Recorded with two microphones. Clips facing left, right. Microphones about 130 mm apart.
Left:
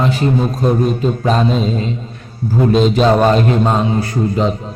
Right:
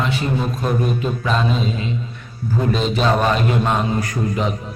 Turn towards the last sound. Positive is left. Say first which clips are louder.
# left 5 dB
turn(degrees=30)  # may be behind; listen again after turning